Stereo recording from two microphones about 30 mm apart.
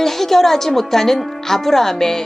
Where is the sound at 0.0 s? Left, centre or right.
Centre.